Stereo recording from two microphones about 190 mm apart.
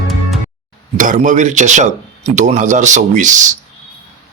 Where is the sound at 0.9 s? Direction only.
40° right (ahead or behind).